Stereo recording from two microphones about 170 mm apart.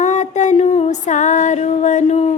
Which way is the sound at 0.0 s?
45° left (ahead or behind).